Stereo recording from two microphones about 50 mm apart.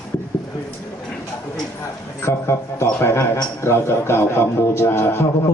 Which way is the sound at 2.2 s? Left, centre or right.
Left.